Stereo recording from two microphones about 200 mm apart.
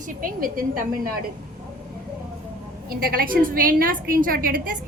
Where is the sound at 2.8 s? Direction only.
45° right (ahead or behind).